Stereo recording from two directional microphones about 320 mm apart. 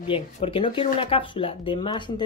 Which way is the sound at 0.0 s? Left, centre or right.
Centre.